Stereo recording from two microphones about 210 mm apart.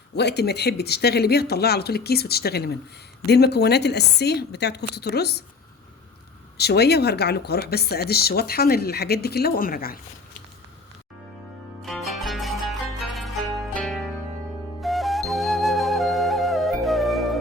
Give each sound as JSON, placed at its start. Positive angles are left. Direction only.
{"t": 0.1, "sound": "speech", "side_deg": 50}
{"t": 6.6, "sound": "speech", "side_deg": 50}
{"t": 11.8, "sound": "zither", "side_deg": 0}
{"t": 14.8, "sound": "flute", "side_deg": 0}